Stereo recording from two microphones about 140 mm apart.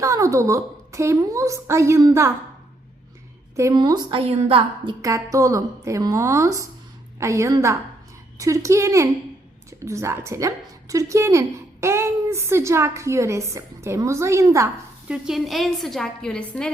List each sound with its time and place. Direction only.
0.0 s a woman's voice: 20° right (ahead or behind)
3.5 s a woman's voice: 20° right (ahead or behind)
3.8 s a woman's voice: 30° right (ahead or behind)
4.2 s a woman's voice: 45° right (ahead or behind)
5.0 s a woman's voice: 25° right (ahead or behind)
15.0 s a woman's voice: 5° right (ahead or behind)